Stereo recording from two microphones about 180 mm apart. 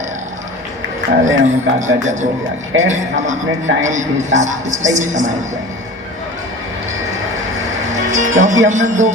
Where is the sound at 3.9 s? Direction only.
40° right (ahead or behind).